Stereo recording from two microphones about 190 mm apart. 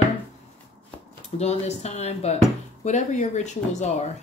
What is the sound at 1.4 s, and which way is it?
Speech, 35° left (ahead or behind).